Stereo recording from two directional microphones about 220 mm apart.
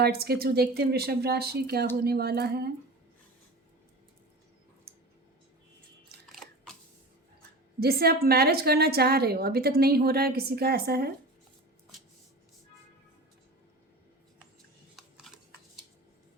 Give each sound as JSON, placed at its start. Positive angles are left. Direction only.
{"t": 0.0, "sound": "a woman's voice", "side_deg": -45}
{"t": 6.2, "sound": "chewing", "side_deg": 0}
{"t": 7.8, "sound": "a woman's voice", "side_deg": -45}
{"t": 15.3, "sound": "a sound", "side_deg": 0}